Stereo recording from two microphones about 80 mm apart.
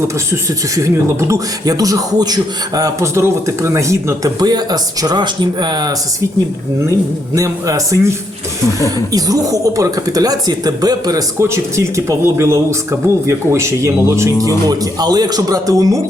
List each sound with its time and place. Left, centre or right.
0.8 s speech: right
7.3 s speech: right
9.1 s speech: right
11.3 s speech: right
14.4 s speech: right